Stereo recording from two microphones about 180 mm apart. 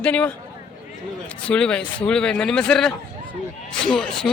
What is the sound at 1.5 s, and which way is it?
A man's voice, 5° left (ahead or behind).